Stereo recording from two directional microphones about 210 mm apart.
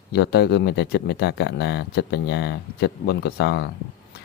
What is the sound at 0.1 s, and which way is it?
Speech, 50° left (ahead or behind).